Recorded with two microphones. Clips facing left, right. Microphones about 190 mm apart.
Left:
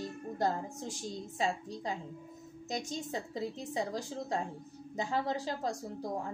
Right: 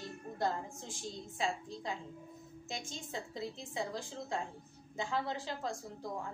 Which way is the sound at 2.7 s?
40° left (ahead or behind).